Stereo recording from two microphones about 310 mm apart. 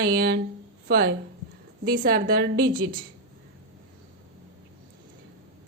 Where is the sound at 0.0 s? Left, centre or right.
Right.